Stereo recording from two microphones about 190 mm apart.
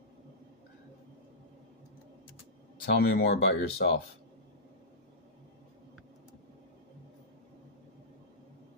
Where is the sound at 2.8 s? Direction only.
60° left (ahead or behind).